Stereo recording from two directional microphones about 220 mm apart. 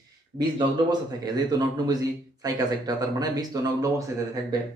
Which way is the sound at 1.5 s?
20° right (ahead or behind).